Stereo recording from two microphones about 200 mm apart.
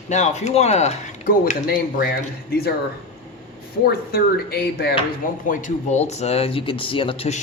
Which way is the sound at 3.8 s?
50° left (ahead or behind).